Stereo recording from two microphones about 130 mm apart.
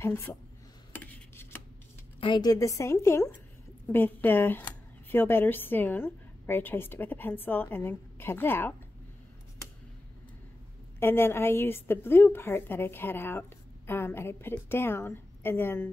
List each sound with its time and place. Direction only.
0.0 s a woman's voice: 20° left (ahead or behind)
0.9 s a sound: 15° left (ahead or behind)
2.1 s a woman's voice: 40° left (ahead or behind); by 8.7 s 15° left (ahead or behind)
11.0 s a woman's voice: 20° left (ahead or behind)